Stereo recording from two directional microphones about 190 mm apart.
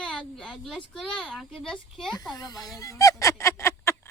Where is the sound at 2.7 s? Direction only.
15° left (ahead or behind).